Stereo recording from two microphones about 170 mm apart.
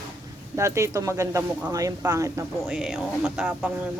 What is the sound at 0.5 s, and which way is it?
Speech, 15° right (ahead or behind).